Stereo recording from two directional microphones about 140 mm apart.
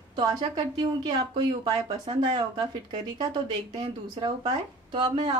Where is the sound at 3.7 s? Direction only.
35° right (ahead or behind).